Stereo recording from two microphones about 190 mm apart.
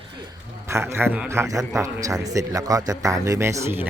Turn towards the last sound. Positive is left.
turn(degrees=-15)  # may be behind; listen again after turning